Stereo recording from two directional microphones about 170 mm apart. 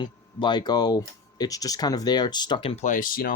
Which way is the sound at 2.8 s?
50° left (ahead or behind).